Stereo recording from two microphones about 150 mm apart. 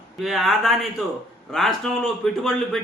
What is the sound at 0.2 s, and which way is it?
A man's voice, centre (ahead or behind).